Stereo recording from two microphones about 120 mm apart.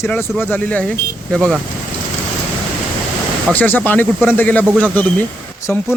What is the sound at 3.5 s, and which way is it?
Speech, 15° left (ahead or behind).